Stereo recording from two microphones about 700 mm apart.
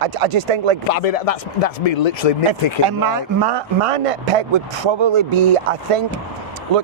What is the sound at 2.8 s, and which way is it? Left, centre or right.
Speech, right.